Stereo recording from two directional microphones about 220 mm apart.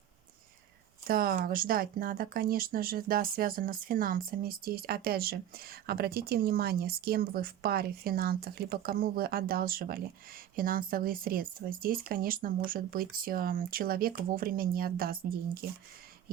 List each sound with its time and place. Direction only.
1.0 s speech: 40° right (ahead or behind)